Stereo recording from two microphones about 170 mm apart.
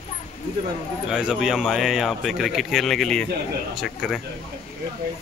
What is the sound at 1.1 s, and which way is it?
Speech, 5° right (ahead or behind).